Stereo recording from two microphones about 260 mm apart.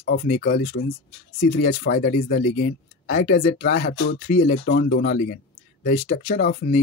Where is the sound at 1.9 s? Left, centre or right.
Left.